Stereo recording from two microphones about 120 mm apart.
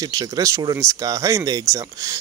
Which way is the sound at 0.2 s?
35° right (ahead or behind).